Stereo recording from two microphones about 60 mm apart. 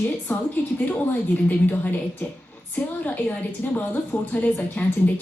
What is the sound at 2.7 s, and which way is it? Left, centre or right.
A woman's voice, left.